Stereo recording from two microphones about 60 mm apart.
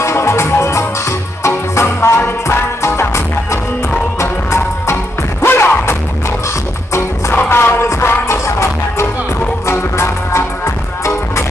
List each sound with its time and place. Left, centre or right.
0.0 s music: left
4.2 s music: left
7.4 s music: left